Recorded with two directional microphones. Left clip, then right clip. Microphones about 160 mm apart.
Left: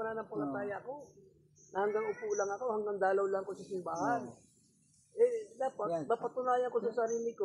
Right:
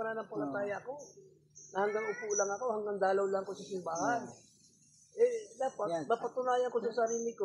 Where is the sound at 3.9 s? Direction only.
15° left (ahead or behind).